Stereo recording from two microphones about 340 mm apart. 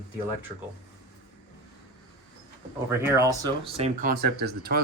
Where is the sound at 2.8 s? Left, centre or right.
Centre; by 4.8 s right.